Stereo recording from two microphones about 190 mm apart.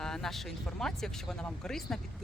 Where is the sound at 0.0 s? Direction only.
Centre (ahead or behind).